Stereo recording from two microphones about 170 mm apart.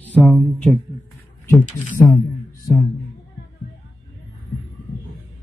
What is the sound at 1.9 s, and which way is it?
Speech, 15° left (ahead or behind).